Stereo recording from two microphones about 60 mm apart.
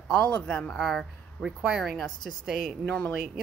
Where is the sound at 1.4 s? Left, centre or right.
Left.